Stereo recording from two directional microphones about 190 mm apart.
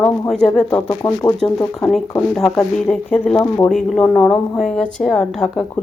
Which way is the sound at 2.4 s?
5° left (ahead or behind).